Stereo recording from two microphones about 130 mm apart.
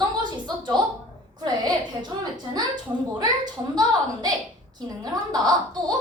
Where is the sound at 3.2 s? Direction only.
30° right (ahead or behind).